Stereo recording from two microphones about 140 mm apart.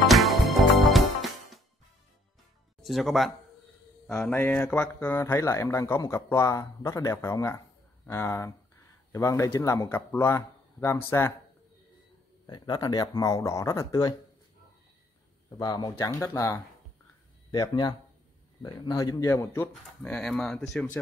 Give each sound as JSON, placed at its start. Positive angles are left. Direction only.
{"t": 0.0, "sound": "music", "side_deg": 0}
{"t": 2.8, "sound": "speech", "side_deg": 0}
{"t": 12.4, "sound": "speech", "side_deg": 30}
{"t": 15.5, "sound": "speech", "side_deg": 30}
{"t": 17.5, "sound": "speech", "side_deg": 30}
{"t": 20.0, "sound": "speech", "side_deg": 5}